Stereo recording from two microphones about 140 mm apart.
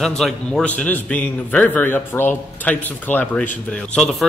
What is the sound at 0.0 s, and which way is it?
A man's voice, 5° left (ahead or behind).